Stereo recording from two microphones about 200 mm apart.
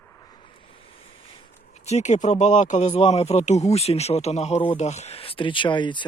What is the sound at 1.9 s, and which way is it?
Speech, 35° left (ahead or behind).